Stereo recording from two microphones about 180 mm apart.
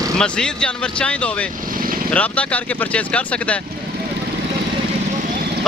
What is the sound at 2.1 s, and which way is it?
Speech, 10° left (ahead or behind).